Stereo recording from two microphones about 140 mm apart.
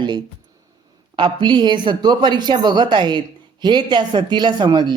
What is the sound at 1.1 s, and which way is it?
A man's voice, 35° right (ahead or behind).